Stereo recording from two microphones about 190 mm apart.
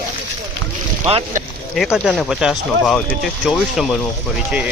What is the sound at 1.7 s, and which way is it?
Speech, centre (ahead or behind).